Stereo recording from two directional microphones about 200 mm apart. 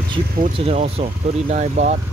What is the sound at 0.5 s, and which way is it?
Speech, 30° right (ahead or behind).